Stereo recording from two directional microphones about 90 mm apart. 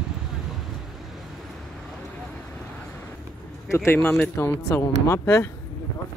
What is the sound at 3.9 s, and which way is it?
Speech, 25° left (ahead or behind).